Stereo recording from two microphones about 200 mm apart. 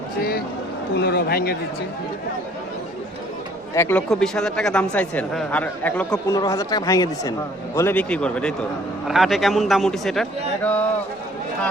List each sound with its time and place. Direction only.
0.9 s speech: 55° left (ahead or behind)
3.8 s a man's voice: 10° left (ahead or behind)